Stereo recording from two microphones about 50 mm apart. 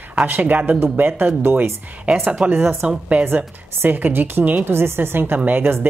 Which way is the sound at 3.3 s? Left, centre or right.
Right.